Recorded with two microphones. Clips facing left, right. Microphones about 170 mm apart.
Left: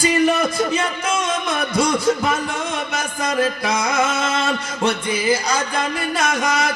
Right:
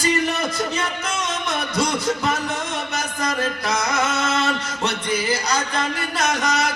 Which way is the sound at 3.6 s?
50° left (ahead or behind).